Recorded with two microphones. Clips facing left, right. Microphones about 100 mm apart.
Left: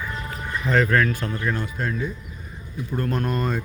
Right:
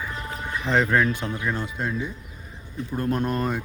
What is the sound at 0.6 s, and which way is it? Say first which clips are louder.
Speech: left 1 dB; 20° right (ahead or behind).